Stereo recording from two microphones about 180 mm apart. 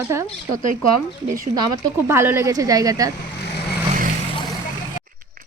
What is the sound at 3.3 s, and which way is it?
Vehicle, 65° left (ahead or behind).